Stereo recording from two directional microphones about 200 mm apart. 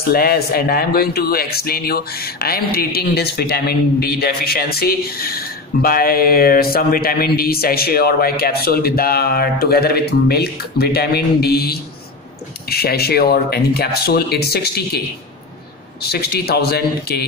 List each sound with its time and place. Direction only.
0.0 s speech: 50° left (ahead or behind)
16.0 s speech: 50° left (ahead or behind)